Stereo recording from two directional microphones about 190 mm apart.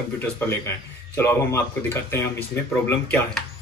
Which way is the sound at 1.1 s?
15° left (ahead or behind).